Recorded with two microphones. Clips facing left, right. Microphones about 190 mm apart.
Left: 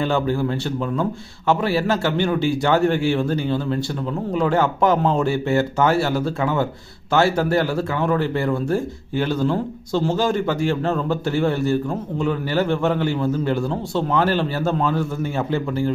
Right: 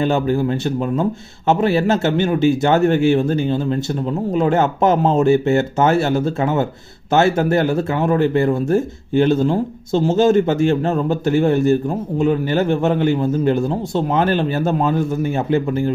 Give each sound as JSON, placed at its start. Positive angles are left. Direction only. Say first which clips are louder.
{"t": 0.0, "sound": "a man's voice", "louder": "right 3 dB", "side_deg": -20}